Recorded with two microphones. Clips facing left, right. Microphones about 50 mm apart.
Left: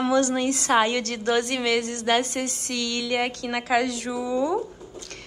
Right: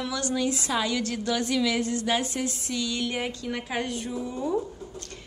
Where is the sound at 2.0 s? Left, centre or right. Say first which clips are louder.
Left 4 dB; left.